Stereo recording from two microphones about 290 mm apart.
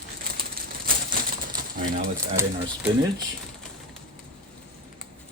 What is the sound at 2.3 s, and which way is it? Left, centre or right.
Speech, centre.